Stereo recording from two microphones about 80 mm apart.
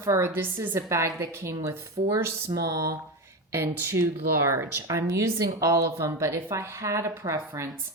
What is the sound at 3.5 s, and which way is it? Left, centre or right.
A woman's voice, right.